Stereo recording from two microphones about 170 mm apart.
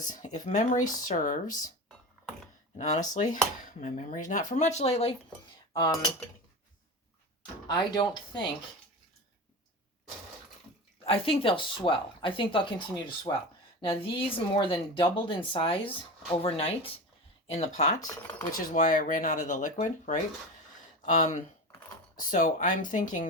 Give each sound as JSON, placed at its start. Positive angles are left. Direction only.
{"t": 0.0, "sound": "speech", "side_deg": 50}
{"t": 2.7, "sound": "speech", "side_deg": 45}
{"t": 5.7, "sound": "cutlery", "side_deg": 25}
{"t": 7.7, "sound": "speech", "side_deg": 25}
{"t": 11.0, "sound": "speech", "side_deg": 35}